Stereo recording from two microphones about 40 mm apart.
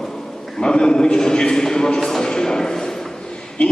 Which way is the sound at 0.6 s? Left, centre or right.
Left.